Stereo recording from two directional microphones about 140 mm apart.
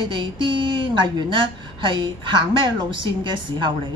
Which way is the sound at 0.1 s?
35° right (ahead or behind).